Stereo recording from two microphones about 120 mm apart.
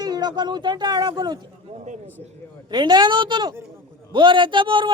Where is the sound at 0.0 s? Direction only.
35° right (ahead or behind).